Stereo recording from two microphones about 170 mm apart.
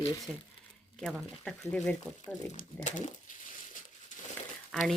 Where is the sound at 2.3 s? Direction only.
45° left (ahead or behind).